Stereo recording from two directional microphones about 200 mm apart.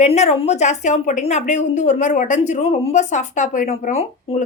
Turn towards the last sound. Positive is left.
turn(degrees=30)  # may be behind; listen again after turning